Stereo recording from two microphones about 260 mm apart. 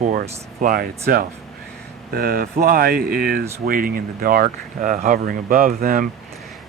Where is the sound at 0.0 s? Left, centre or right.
Right.